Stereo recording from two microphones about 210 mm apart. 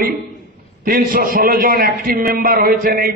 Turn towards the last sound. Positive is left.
turn(degrees=-45)  # may be behind; listen again after turning